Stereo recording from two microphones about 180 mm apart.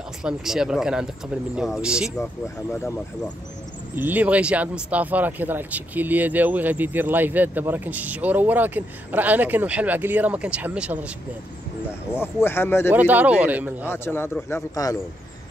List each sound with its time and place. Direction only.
0.2 s speech: 5° right (ahead or behind)
3.9 s speech: 10° right (ahead or behind)
12.2 s speech: 15° left (ahead or behind)
12.9 s speech: 10° right (ahead or behind)
13.8 s speech: 15° left (ahead or behind)